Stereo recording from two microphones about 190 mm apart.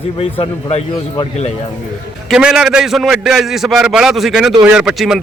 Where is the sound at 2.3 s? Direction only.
5° right (ahead or behind).